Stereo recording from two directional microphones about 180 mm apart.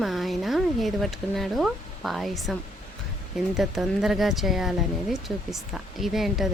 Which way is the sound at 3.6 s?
Centre (ahead or behind).